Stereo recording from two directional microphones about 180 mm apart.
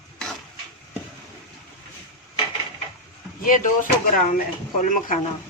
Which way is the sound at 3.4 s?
50° left (ahead or behind).